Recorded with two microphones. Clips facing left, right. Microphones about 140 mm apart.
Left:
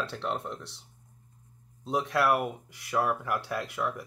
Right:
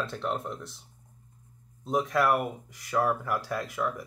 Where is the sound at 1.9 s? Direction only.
Centre (ahead or behind).